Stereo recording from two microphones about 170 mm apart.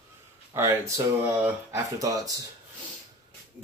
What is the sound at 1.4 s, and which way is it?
Speech, 20° right (ahead or behind).